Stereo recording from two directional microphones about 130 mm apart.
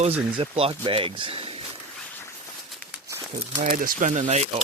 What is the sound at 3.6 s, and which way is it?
Speech, 90° right.